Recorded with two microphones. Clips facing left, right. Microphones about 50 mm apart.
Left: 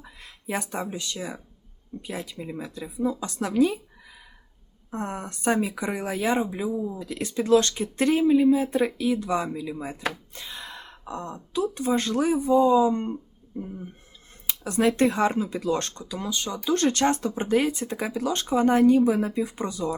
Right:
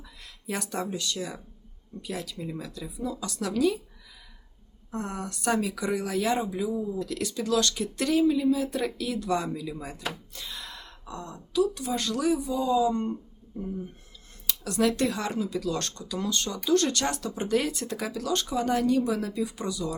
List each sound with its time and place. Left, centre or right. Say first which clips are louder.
0.0 s speech: left 3 dB; left
4.9 s speech: left 2 dB; left
16.6 s speech: left 3 dB; left